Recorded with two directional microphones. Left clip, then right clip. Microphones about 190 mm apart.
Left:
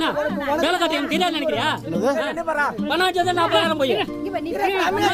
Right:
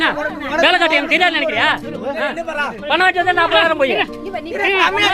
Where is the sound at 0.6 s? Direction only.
45° left (ahead or behind).